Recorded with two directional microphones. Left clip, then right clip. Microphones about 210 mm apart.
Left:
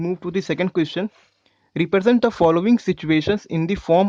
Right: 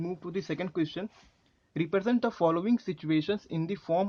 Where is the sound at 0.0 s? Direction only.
45° left (ahead or behind).